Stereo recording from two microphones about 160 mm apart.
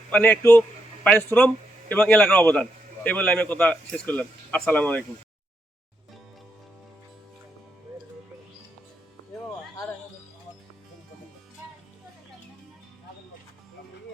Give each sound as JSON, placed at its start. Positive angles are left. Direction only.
{"t": 0.1, "sound": "a man's voice", "side_deg": 10}
{"t": 9.4, "sound": "music", "side_deg": 15}